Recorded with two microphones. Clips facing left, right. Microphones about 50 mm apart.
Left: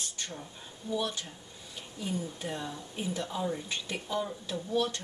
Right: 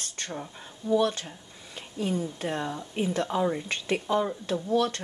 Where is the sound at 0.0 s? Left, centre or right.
Right.